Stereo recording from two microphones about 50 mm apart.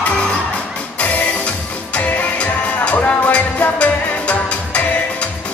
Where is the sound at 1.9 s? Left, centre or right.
Left.